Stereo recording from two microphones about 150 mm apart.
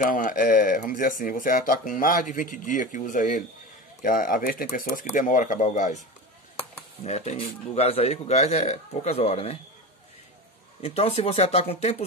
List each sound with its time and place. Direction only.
0.0 s speech: 60° left (ahead or behind); by 9.6 s 45° left (ahead or behind)
10.8 s speech: 45° left (ahead or behind)